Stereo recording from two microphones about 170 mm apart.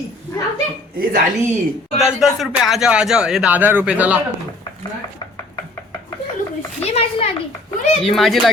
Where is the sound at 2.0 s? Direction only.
Centre (ahead or behind).